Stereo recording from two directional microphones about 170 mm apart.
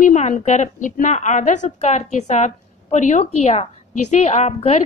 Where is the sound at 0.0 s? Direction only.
45° left (ahead or behind).